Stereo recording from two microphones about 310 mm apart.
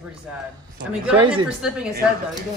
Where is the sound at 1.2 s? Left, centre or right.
Centre.